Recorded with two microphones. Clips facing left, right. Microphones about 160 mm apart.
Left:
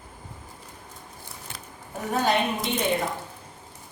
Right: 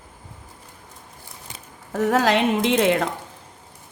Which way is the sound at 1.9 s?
90° right.